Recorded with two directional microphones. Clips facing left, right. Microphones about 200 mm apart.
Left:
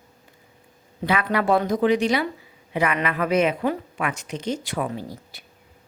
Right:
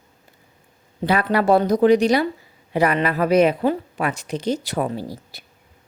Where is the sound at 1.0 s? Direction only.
35° right (ahead or behind).